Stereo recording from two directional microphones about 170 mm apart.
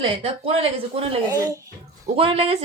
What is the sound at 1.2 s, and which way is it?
Speech, 20° right (ahead or behind).